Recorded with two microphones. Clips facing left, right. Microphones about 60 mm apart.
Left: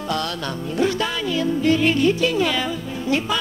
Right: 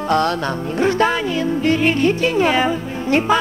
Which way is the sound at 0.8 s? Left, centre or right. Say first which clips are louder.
Right 5 dB; right.